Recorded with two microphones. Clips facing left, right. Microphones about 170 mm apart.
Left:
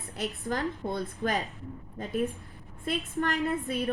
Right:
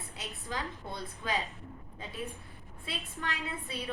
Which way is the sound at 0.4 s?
55° left (ahead or behind).